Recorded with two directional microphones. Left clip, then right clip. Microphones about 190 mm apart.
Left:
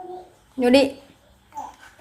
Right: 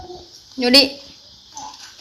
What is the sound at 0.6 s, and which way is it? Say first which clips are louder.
Speech: right 3 dB; 10° left (ahead or behind).